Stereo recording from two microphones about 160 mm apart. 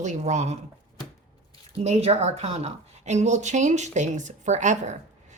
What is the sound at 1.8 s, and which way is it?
Speech, 40° right (ahead or behind).